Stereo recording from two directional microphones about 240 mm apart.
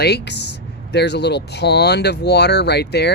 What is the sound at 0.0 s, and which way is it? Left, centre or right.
Speech, left.